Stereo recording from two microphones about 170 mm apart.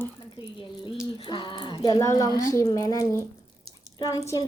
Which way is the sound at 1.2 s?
30° left (ahead or behind).